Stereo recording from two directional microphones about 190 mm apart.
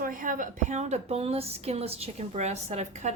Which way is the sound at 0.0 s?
45° right (ahead or behind).